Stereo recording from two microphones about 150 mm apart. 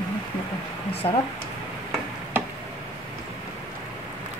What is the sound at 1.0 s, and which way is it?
Speech, 25° left (ahead or behind).